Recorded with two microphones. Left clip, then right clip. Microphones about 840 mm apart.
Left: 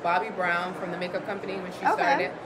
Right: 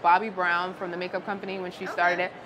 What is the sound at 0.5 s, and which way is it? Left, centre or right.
A woman's voice, right.